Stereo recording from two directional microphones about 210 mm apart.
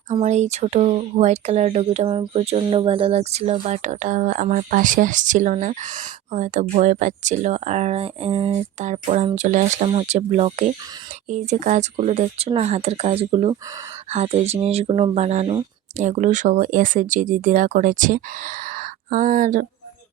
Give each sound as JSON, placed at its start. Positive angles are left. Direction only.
{"t": 0.1, "sound": "speech", "side_deg": -35}